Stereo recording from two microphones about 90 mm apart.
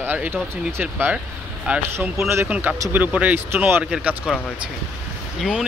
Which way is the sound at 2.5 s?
15° right (ahead or behind).